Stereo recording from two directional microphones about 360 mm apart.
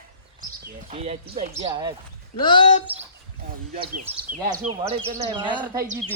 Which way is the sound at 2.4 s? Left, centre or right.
Centre.